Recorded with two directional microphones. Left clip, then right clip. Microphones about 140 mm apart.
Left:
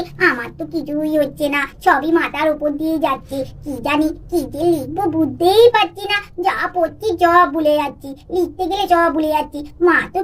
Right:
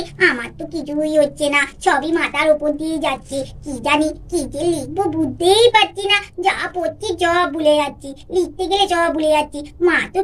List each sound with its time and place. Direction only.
0.2 s a child's voice: 55° left (ahead or behind)